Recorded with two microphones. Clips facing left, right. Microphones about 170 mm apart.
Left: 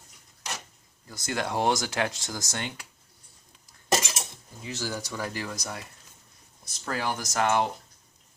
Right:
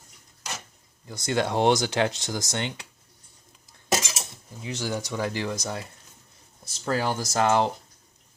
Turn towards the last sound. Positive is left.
turn(degrees=-30)  # may be behind; listen again after turning